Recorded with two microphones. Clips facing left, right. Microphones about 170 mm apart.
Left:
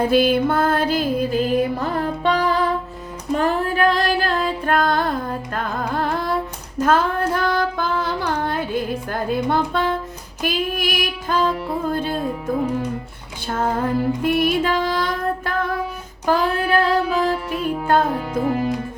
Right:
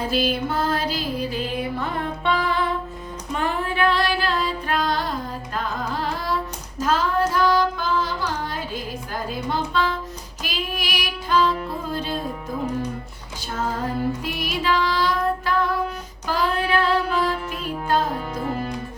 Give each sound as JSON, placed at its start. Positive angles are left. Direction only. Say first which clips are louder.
{"t": 0.1, "sound": "music", "louder": "left 7 dB", "side_deg": 55}
{"t": 3.3, "sound": "female singing", "louder": "left 5 dB", "side_deg": 40}
{"t": 9.3, "sound": "music", "louder": "left 5 dB", "side_deg": 55}
{"t": 13.5, "sound": "music", "louder": "left 5 dB", "side_deg": 55}
{"t": 16.2, "sound": "child singing", "louder": "left 4 dB", "side_deg": 50}